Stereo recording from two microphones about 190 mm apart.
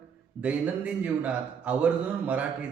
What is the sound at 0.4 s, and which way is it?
A man's voice, 5° right (ahead or behind).